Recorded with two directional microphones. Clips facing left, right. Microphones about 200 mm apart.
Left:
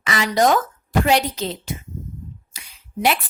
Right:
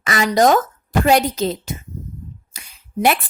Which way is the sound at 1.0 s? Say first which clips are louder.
Right 4 dB; 45° right (ahead or behind).